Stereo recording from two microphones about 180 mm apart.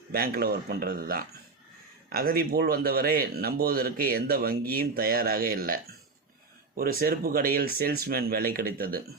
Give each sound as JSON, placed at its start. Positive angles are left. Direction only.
{"t": 0.1, "sound": "speech", "side_deg": -55}